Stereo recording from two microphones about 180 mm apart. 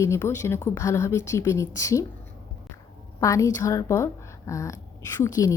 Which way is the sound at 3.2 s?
15° left (ahead or behind).